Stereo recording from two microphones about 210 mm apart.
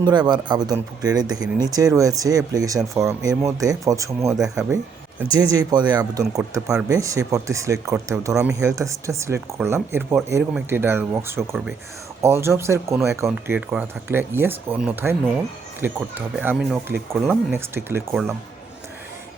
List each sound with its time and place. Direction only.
0.0 s speech: 20° right (ahead or behind)